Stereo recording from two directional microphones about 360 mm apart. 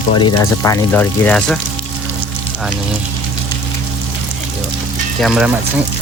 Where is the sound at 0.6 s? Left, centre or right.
Centre.